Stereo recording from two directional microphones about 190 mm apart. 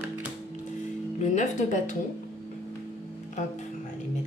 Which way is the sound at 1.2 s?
40° left (ahead or behind).